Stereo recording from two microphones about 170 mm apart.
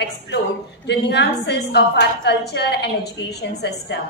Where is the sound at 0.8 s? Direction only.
80° left.